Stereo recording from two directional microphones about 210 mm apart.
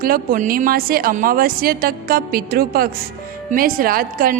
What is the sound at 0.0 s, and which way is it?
A woman's voice, 45° right (ahead or behind).